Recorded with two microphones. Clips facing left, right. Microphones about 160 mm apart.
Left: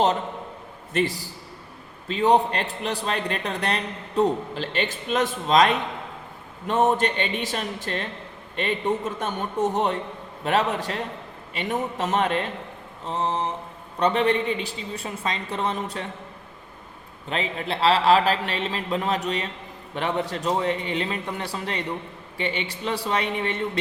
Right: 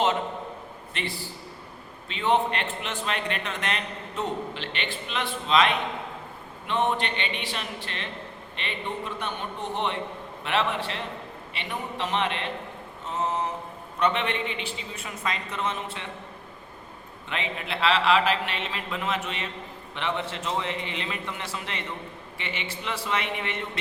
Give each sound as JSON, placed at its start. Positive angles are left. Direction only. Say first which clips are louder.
{"t": 0.9, "sound": "a man's voice", "louder": "left 10 dB", "side_deg": 40}
{"t": 13.1, "sound": "a man's voice", "louder": "left 2 dB", "side_deg": 30}
{"t": 17.2, "sound": "a man's voice", "louder": "left 5 dB", "side_deg": 35}